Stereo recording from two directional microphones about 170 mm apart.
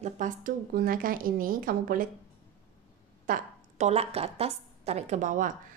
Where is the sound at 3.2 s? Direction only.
55° right (ahead or behind).